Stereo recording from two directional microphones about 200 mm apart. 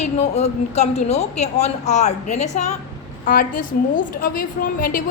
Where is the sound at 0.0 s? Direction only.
35° left (ahead or behind).